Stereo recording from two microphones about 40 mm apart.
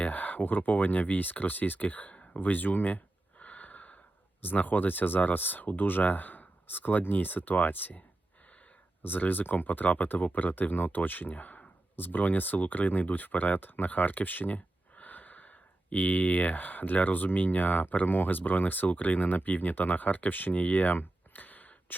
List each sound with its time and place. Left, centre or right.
0.0 s speech: left
2.3 s gasp: left
4.4 s speech: left
9.0 s speech: left